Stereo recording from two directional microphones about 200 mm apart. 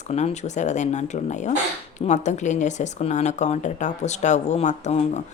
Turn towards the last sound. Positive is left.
turn(degrees=35)  # may be behind; listen again after turning